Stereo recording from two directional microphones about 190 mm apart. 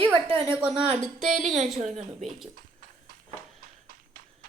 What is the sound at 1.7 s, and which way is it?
Speech, 35° right (ahead or behind).